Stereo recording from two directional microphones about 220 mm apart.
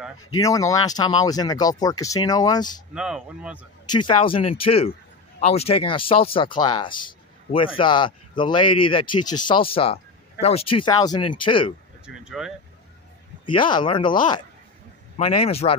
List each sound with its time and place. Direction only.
0.4 s speech: 15° left (ahead or behind)
2.9 s speech: 5° right (ahead or behind)
3.8 s speech: 20° left (ahead or behind)
12.1 s speech: centre (ahead or behind)
13.5 s speech: 20° left (ahead or behind)
15.1 s speech: 30° left (ahead or behind)